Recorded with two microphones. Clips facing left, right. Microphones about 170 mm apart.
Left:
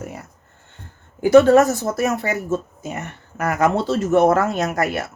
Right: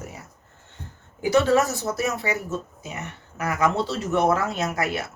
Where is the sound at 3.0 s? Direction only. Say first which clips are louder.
Left 4 dB; 45° left (ahead or behind).